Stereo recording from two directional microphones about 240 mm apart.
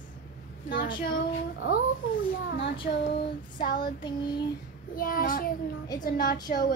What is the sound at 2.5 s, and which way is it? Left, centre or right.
Child singing, left.